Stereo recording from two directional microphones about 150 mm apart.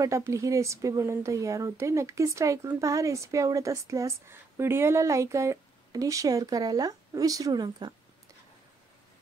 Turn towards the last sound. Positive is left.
turn(degrees=-25)  # may be behind; listen again after turning